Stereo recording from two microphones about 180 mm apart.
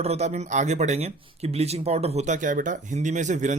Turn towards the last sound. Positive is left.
turn(degrees=-40)  # may be behind; listen again after turning